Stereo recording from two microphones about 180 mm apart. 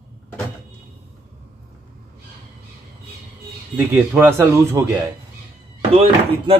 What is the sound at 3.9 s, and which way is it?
Speech, 15° right (ahead or behind).